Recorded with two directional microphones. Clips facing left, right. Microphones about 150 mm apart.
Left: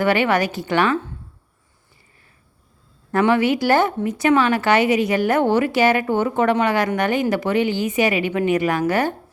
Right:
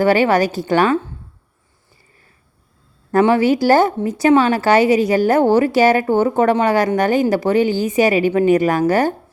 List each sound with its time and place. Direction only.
0.0 s speech: 35° right (ahead or behind)
3.1 s speech: 35° right (ahead or behind)